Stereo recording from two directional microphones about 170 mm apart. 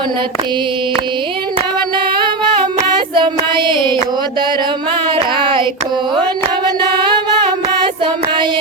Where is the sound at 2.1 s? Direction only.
25° right (ahead or behind).